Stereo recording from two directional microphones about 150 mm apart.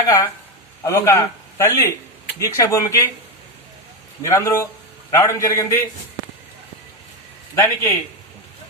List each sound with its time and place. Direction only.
0.8 s a man's voice: 20° left (ahead or behind)
4.2 s speech: 20° left (ahead or behind)
7.5 s speech: 20° left (ahead or behind)